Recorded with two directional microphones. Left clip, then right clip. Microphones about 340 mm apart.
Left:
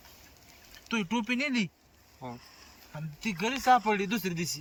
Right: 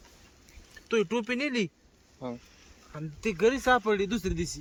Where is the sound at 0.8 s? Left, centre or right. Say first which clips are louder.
Right 4 dB; centre.